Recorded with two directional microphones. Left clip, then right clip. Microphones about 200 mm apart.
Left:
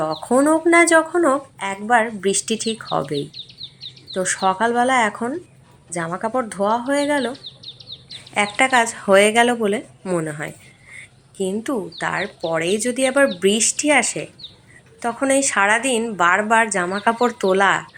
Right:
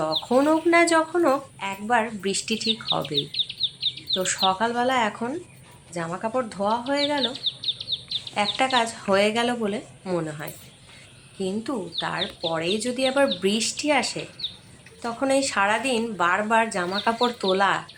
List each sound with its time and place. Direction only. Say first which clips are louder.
0.0 s speech: left 3 dB; 15° left (ahead or behind)
3.6 s bird: right 9 dB; 20° left (ahead or behind)
4.1 s speech: left 4 dB; 15° left (ahead or behind)
7.3 s chirp: right 9 dB; 40° left (ahead or behind)
8.5 s speech: left 7 dB; 15° left (ahead or behind)